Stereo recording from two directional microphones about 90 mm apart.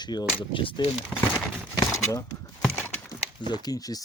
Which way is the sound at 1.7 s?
40° left (ahead or behind).